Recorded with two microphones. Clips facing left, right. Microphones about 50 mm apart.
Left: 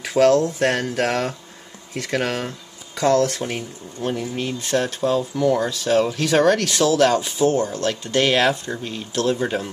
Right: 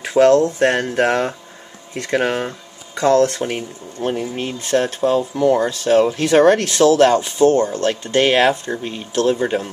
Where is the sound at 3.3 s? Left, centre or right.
Right.